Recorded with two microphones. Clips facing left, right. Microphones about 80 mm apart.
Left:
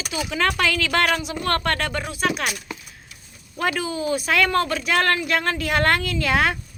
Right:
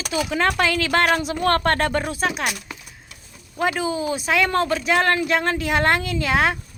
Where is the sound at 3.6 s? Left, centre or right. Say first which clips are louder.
Right 2 dB; right.